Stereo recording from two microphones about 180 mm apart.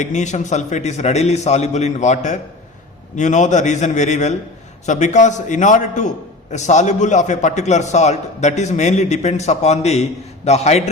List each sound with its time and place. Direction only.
0.0 s a man's voice: 40° left (ahead or behind)